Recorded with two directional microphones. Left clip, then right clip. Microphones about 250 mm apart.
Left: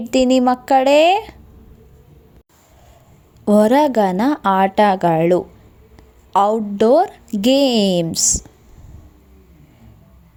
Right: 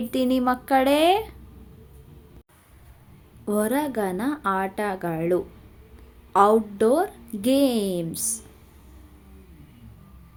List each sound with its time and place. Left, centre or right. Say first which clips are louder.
0.0 s a woman's voice: left 9 dB; left
3.4 s a woman's voice: left 12 dB; left